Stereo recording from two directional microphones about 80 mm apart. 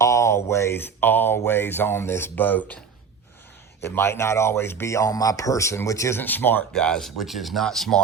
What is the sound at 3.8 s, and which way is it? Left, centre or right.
Speech, left.